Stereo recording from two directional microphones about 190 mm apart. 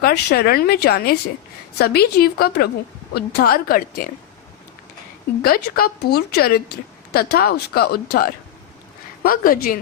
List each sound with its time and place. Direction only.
0.0 s speech: 55° left (ahead or behind)
5.4 s speech: 50° left (ahead or behind)